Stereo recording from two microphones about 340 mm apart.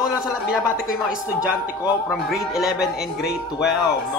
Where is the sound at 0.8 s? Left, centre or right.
Centre.